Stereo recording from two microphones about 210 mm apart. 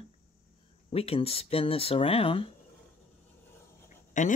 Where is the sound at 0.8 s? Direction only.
30° left (ahead or behind).